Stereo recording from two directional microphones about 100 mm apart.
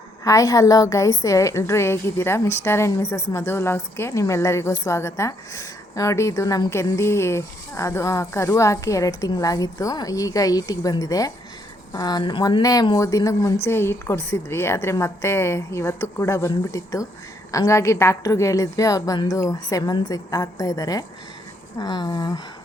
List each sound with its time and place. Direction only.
0.3 s a woman's voice: 35° left (ahead or behind)